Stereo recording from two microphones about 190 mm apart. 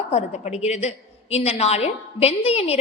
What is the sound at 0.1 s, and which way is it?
A woman's voice, 35° left (ahead or behind).